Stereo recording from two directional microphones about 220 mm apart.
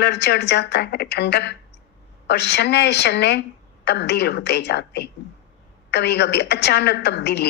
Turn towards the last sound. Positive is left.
turn(degrees=50)  # may be behind; listen again after turning